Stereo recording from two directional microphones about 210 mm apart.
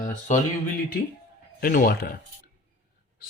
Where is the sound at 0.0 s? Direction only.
35° left (ahead or behind).